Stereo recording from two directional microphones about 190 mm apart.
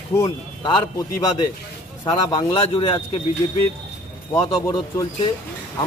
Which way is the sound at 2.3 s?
25° left (ahead or behind).